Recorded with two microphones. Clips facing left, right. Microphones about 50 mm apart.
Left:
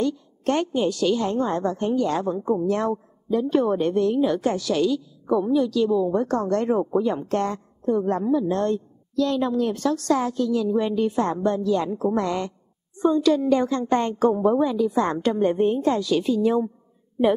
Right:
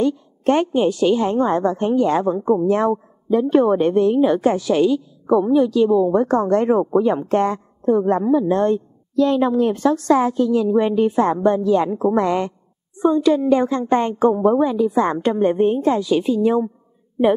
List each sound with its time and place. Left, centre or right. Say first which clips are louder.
0.0 s a woman's voice: right 5 dB; right